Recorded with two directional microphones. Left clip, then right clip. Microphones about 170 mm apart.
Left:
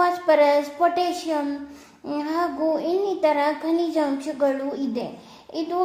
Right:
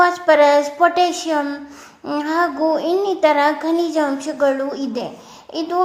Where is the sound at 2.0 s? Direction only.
15° right (ahead or behind).